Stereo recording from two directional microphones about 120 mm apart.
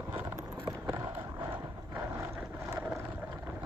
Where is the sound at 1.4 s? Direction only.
15° right (ahead or behind).